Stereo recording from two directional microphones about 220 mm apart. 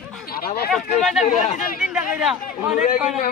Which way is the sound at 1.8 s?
5° right (ahead or behind).